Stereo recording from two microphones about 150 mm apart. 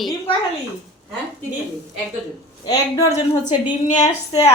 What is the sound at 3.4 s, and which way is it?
Speech, 55° left (ahead or behind).